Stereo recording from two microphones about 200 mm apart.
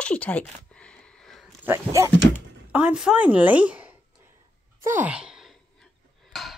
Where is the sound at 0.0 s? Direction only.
5° left (ahead or behind).